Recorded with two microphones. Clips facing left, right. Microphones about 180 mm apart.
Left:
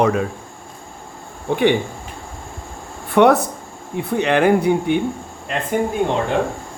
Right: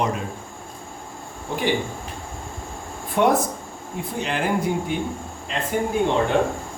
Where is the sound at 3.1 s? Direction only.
70° left (ahead or behind).